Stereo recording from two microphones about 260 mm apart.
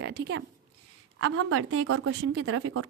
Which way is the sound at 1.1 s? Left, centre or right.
Right.